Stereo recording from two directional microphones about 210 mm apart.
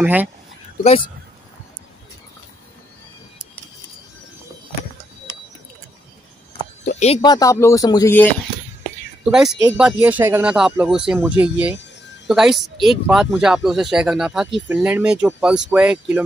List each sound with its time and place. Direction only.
0.0 s speech: 10° right (ahead or behind)
7.2 s speech: 20° left (ahead or behind)
9.2 s speech: centre (ahead or behind)